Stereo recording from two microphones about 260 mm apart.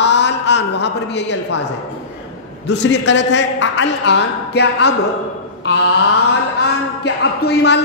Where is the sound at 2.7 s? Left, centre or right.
Left.